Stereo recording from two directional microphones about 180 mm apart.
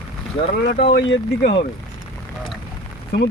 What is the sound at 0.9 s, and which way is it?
Speech, 65° left (ahead or behind).